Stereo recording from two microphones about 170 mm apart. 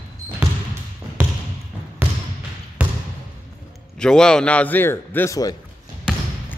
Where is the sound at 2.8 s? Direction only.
10° right (ahead or behind).